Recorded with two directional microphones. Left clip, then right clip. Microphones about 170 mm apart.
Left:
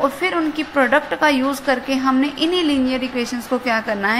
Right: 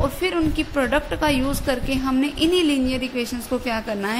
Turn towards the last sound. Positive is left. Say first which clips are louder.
# left 6 dB
turn(degrees=-25)  # may be behind; listen again after turning